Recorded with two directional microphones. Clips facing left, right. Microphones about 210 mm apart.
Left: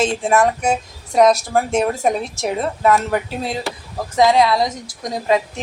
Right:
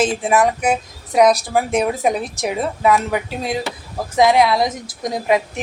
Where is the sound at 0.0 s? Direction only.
5° right (ahead or behind).